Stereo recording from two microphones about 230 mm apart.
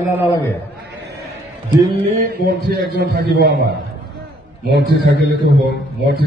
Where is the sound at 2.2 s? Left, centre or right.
Right.